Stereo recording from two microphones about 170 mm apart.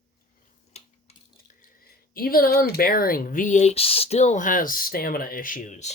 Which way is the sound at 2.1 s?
60° left (ahead or behind).